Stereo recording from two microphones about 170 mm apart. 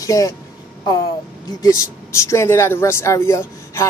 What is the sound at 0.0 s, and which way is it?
Speech, 20° left (ahead or behind).